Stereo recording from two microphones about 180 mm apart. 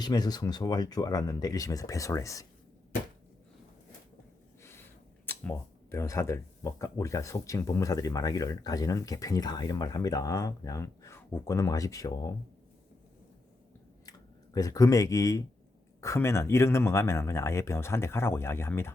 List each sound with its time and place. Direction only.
0.0 s speech: 20° left (ahead or behind)
4.6 s speech: 15° left (ahead or behind)
14.0 s speech: 20° left (ahead or behind)